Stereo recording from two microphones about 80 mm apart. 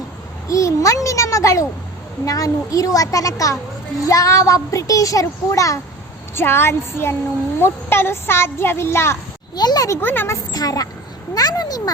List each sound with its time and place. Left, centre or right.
0.4 s a child's voice: left
6.3 s a child's voice: left
9.6 s a woman's voice: left
10.0 s speech: left
10.5 s a woman's voice: left